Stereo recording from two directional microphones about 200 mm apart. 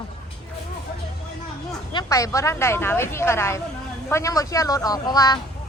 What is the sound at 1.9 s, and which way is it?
A woman's voice, 15° left (ahead or behind).